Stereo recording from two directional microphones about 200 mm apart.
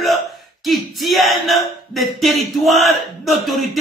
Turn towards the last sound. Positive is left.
turn(degrees=0)  # may be behind; listen again after turning